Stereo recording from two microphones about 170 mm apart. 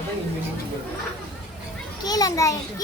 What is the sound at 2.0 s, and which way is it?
Speech, 20° left (ahead or behind).